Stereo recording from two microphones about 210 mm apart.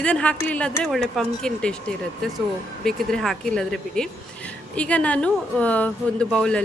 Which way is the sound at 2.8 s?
Centre (ahead or behind).